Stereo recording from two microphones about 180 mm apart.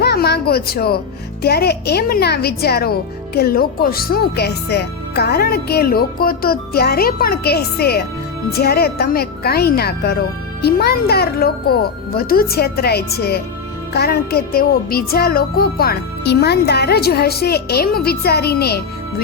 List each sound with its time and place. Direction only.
0.0 s speech: 65° left (ahead or behind)